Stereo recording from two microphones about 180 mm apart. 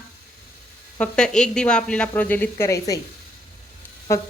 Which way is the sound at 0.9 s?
5° left (ahead or behind).